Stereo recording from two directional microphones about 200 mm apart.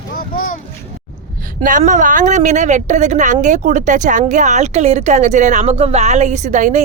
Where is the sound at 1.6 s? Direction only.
40° right (ahead or behind).